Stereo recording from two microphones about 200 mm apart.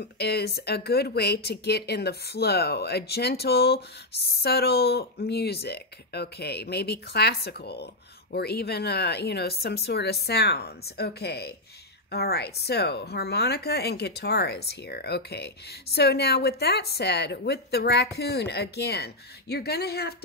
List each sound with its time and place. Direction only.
0.0 s speech: 55° left (ahead or behind)